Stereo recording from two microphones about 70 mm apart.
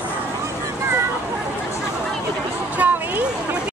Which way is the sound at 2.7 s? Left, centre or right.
Right.